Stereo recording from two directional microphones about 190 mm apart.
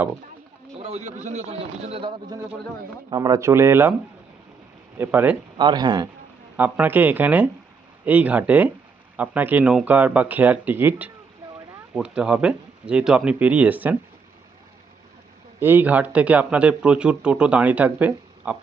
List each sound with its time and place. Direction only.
0.8 s a man's voice: 30° right (ahead or behind); by 3.9 s 15° right (ahead or behind)
4.9 s speech: 10° right (ahead or behind)
5.5 s speech: 20° right (ahead or behind)
6.6 s speech: 10° right (ahead or behind)
15.6 s speech: 10° right (ahead or behind)